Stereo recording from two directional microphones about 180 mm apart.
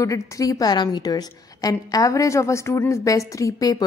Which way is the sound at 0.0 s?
20° left (ahead or behind).